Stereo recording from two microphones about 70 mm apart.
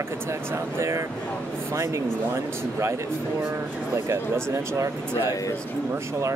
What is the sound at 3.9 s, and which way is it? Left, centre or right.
Speech, right.